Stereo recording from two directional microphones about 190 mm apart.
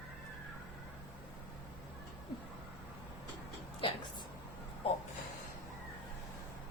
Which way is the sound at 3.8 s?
25° left (ahead or behind).